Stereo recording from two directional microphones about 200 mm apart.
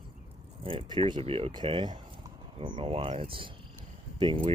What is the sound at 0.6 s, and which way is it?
Speech, 25° right (ahead or behind).